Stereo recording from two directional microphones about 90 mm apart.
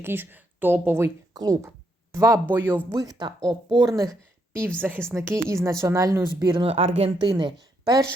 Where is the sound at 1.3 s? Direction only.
40° right (ahead or behind).